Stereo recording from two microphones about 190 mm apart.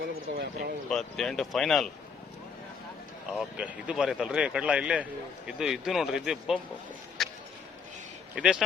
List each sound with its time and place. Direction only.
0.0 s speech: 50° right (ahead or behind)
0.9 s a man's voice: centre (ahead or behind)
3.3 s a man's voice: 5° right (ahead or behind)
7.2 s a sound: centre (ahead or behind)
8.4 s a man's voice: 5° right (ahead or behind)